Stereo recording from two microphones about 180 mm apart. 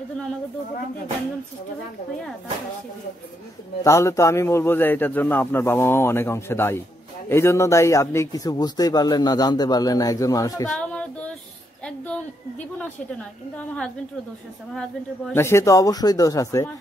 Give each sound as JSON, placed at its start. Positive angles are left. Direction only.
{"t": 3.8, "sound": "a man's voice", "side_deg": 15}
{"t": 10.7, "sound": "female singing", "side_deg": 5}
{"t": 11.8, "sound": "a woman's voice", "side_deg": 5}
{"t": 15.3, "sound": "a man's voice", "side_deg": 15}